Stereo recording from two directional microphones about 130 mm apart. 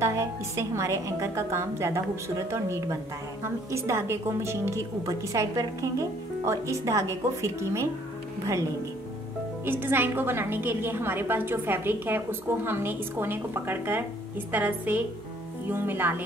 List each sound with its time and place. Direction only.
0.0 s a woman's voice: 25° right (ahead or behind)
9.7 s a woman's voice: 15° right (ahead or behind)